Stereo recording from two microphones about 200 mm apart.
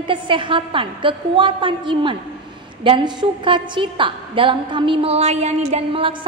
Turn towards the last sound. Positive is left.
turn(degrees=-25)  # may be behind; listen again after turning